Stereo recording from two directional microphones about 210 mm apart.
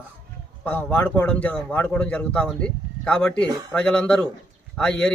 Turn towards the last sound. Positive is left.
turn(degrees=5)  # may be behind; listen again after turning